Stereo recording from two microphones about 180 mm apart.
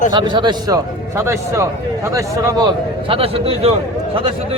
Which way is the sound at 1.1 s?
15° right (ahead or behind).